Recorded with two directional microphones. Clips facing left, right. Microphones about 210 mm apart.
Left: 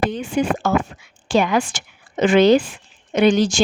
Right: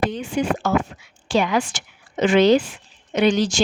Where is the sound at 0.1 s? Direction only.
50° left (ahead or behind).